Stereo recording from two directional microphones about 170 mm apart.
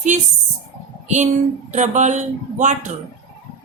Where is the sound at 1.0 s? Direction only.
45° right (ahead or behind).